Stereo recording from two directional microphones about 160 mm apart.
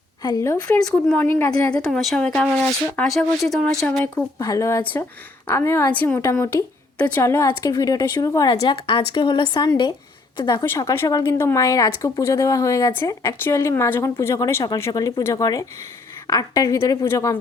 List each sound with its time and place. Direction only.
0.2 s speech: 20° left (ahead or behind)
0.7 s speech: 5° left (ahead or behind)
1.7 s speech: 5° left (ahead or behind)
4.4 s speech: 20° left (ahead or behind)
8.6 s speech: 35° left (ahead or behind); by 17.3 s 20° left (ahead or behind)